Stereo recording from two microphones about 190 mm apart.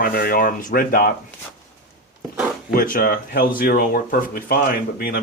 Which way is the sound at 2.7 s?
50° left (ahead or behind).